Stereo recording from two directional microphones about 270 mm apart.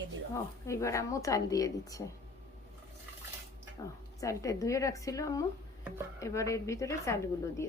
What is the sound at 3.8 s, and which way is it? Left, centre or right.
A woman's voice, centre.